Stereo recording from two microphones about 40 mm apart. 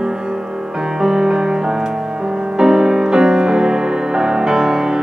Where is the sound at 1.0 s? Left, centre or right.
Centre.